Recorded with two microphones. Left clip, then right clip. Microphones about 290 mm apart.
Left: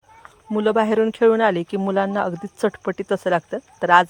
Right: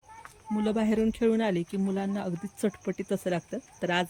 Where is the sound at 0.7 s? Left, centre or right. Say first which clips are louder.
Left 10 dB; left.